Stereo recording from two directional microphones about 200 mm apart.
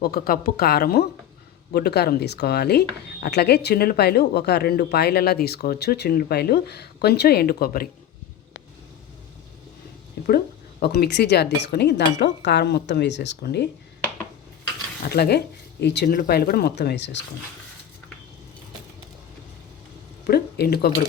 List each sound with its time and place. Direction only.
0.0 s speech: 50° left (ahead or behind)
10.2 s speech: 50° left (ahead or behind)
15.1 s speech: 55° left (ahead or behind)
20.2 s a sound: 50° left (ahead or behind)